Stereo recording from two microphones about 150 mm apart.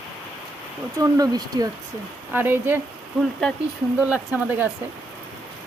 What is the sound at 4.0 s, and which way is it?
Speech, 10° right (ahead or behind).